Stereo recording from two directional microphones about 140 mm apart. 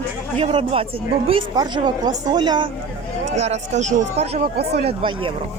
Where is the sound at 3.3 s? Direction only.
55° right (ahead or behind).